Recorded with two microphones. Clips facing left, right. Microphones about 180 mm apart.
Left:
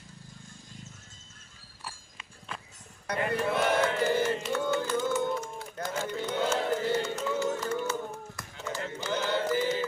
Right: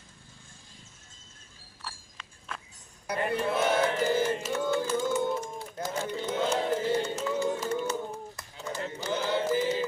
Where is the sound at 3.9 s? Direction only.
10° right (ahead or behind).